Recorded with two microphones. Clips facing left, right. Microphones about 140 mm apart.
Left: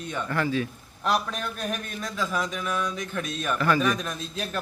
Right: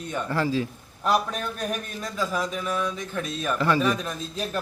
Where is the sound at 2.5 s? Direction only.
30° right (ahead or behind).